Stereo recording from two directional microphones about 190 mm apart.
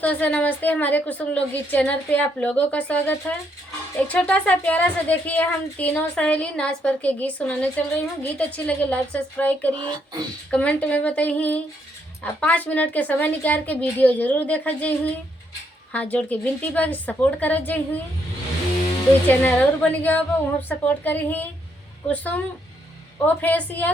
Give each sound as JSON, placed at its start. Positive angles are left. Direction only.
{"t": 0.0, "sound": "a woman's voice", "side_deg": 10}
{"t": 9.7, "sound": "speech", "side_deg": -20}
{"t": 10.5, "sound": "a woman's voice", "side_deg": 5}
{"t": 19.3, "sound": "a woman's voice", "side_deg": 10}